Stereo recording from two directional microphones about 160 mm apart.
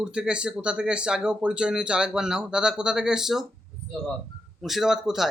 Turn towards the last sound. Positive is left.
turn(degrees=0)  # may be behind; listen again after turning